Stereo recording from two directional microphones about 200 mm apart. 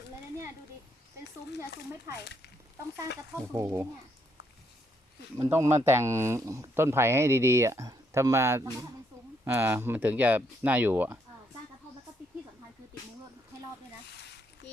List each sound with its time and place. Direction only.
2.2 s speech: 55° left (ahead or behind)
3.5 s speech: 15° right (ahead or behind)
5.4 s speech: 15° right (ahead or behind)